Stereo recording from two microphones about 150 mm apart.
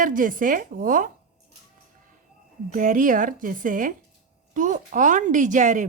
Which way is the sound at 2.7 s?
60° right (ahead or behind).